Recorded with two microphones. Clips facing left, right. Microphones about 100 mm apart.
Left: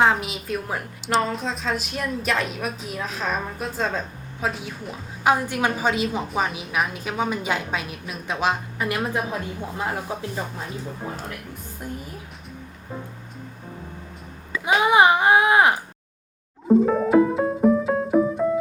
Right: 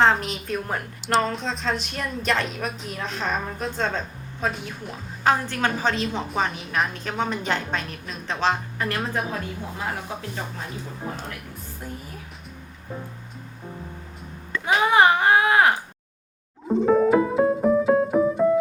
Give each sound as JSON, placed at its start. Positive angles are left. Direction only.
{"t": 0.0, "sound": "a woman's voice", "side_deg": 5}
{"t": 5.2, "sound": "a woman's voice", "side_deg": 10}
{"t": 10.1, "sound": "speech", "side_deg": 20}
{"t": 11.8, "sound": "a woman's voice", "side_deg": 15}
{"t": 14.5, "sound": "a woman's voice", "side_deg": 10}
{"t": 16.6, "sound": "music", "side_deg": 0}